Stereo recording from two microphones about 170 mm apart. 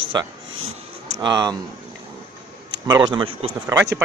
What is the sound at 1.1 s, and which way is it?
Speech, 25° right (ahead or behind).